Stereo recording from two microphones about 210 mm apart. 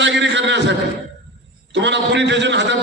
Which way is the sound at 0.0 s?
60° right (ahead or behind).